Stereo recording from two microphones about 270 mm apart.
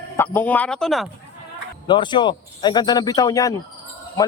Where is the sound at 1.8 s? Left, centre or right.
Centre.